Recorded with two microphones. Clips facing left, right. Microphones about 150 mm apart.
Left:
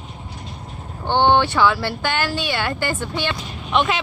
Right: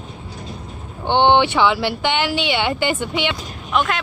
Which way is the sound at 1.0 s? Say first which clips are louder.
Right 2 dB; 20° right (ahead or behind).